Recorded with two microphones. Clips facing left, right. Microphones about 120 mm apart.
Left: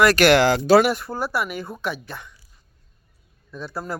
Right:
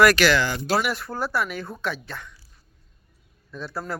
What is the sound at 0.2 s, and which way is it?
Speech, 65° left (ahead or behind).